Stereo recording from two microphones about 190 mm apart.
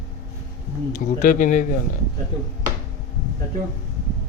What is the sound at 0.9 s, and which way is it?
Speech, 40° left (ahead or behind).